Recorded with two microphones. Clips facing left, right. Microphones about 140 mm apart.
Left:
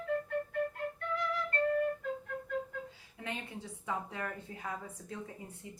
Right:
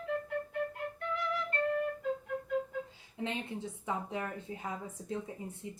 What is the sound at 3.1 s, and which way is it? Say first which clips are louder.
Speech: right 5 dB; 25° right (ahead or behind).